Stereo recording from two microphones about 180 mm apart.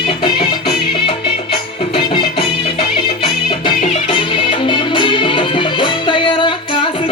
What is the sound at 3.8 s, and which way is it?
Music, 30° left (ahead or behind).